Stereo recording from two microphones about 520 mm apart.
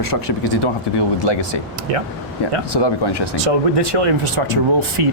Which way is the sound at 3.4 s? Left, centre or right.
Right.